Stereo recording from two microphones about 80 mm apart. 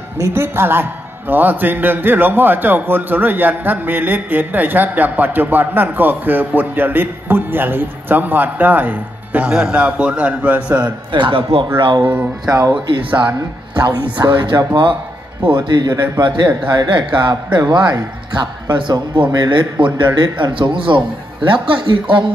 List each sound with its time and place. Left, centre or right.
0.3 s a man's voice: right
9.5 s a man's voice: centre
11.1 s a man's voice: right
12.0 s a man's voice: right
12.4 s speech: right
13.1 s a man's voice: right
13.7 s a man's voice: right
20.2 s a man's voice: right